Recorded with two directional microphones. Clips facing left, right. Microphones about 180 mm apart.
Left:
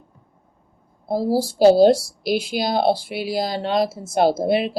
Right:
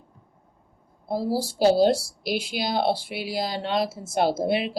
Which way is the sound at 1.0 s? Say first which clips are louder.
Left 5 dB; 40° left (ahead or behind).